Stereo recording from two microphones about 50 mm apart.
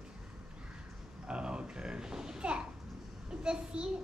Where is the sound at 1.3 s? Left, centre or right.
Centre.